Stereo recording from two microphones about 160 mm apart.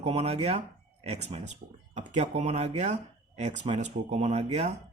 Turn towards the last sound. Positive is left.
turn(degrees=-45)  # may be behind; listen again after turning